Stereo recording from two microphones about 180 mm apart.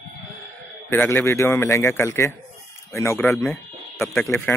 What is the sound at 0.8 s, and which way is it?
Speech, 15° left (ahead or behind).